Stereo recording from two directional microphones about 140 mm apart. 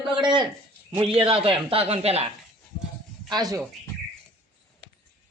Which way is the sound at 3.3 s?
25° right (ahead or behind).